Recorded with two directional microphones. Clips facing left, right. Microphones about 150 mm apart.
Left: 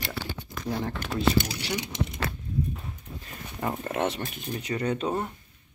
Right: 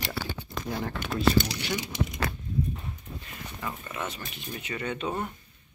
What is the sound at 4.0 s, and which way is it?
Speech, 70° left (ahead or behind).